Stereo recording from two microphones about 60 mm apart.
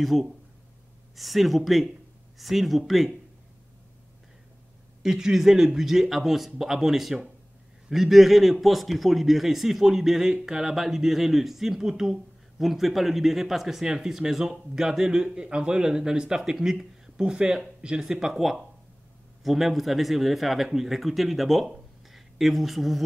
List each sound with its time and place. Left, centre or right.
0.0 s a man's voice: centre
5.0 s a man's voice: centre